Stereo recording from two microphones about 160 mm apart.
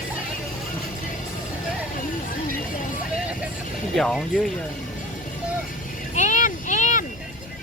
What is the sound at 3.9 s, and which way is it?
Speech, centre (ahead or behind).